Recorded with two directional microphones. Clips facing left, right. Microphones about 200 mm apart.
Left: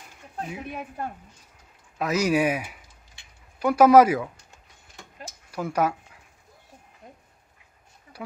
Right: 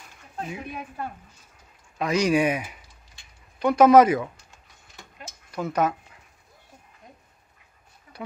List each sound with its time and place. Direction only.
0.7 s a woman's voice: 45° left (ahead or behind)
2.0 s speech: 5° left (ahead or behind)
5.5 s speech: 10° left (ahead or behind)